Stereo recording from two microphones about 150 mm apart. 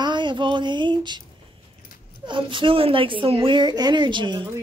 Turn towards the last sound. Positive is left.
turn(degrees=-30)  # may be behind; listen again after turning